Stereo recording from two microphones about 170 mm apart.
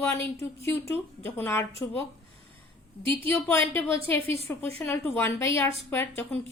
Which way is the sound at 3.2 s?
15° left (ahead or behind).